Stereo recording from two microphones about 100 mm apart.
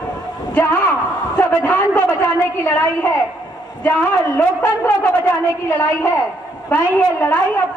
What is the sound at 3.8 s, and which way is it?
A man's voice, 15° left (ahead or behind).